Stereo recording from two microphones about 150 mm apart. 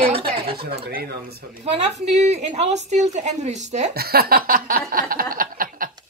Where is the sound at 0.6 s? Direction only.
90° right.